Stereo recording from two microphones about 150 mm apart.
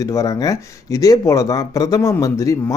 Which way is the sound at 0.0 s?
20° left (ahead or behind).